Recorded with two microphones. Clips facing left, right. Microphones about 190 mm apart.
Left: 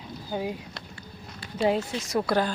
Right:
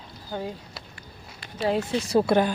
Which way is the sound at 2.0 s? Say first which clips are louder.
Right 5 dB; 30° right (ahead or behind).